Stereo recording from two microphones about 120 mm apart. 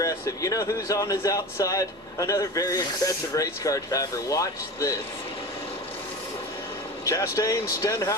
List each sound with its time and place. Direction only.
0.0 s speech: 30° left (ahead or behind)
7.0 s speech: 25° left (ahead or behind)